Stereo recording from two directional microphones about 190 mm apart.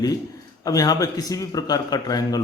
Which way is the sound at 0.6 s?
20° left (ahead or behind).